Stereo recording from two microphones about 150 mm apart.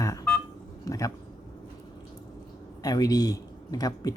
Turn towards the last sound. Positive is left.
turn(degrees=25)  # may be behind; listen again after turning